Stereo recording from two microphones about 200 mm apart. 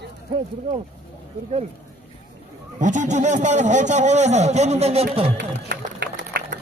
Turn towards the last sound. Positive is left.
turn(degrees=-55)  # may be behind; listen again after turning